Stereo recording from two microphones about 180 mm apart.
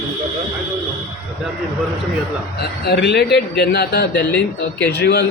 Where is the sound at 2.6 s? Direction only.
65° left (ahead or behind).